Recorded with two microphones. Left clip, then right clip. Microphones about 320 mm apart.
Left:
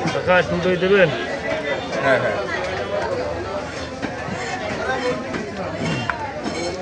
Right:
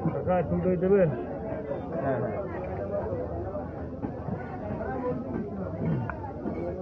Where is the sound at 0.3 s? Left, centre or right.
Left.